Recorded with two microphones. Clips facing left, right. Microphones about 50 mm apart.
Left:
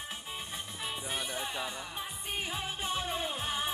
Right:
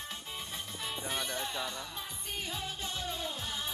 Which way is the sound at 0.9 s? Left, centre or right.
Centre.